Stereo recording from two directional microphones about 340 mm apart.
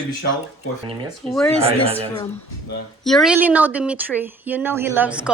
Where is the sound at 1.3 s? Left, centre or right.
Centre.